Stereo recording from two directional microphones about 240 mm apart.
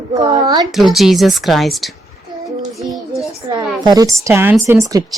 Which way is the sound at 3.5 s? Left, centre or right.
Centre.